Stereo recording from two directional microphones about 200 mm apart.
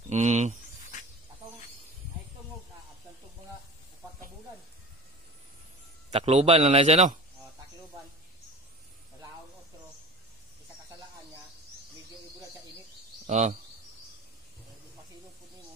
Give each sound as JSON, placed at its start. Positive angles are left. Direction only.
{"t": 0.1, "sound": "a man's voice", "side_deg": -35}
{"t": 6.0, "sound": "a man's voice", "side_deg": -35}
{"t": 13.3, "sound": "a man's voice", "side_deg": -35}